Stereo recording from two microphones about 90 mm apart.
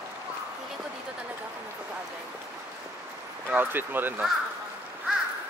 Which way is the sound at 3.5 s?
25° right (ahead or behind).